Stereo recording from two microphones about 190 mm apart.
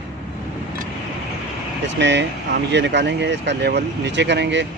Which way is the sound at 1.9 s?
65° right (ahead or behind).